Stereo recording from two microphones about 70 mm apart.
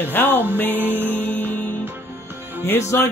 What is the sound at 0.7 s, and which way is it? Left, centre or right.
Music, right.